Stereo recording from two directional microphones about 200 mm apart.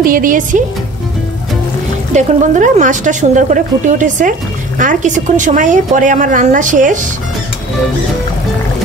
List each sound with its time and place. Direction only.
0.0 s speech: 45° right (ahead or behind)
2.1 s a woman's voice: 40° right (ahead or behind)